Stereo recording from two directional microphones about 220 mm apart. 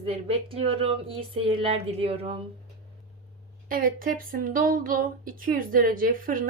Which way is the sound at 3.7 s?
40° right (ahead or behind).